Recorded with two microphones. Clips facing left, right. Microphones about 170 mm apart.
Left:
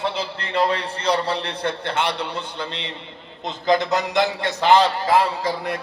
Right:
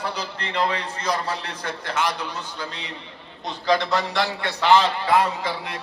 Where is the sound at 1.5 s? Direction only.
60° left (ahead or behind).